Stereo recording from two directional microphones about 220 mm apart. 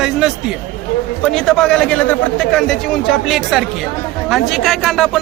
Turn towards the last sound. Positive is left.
turn(degrees=0)  # may be behind; listen again after turning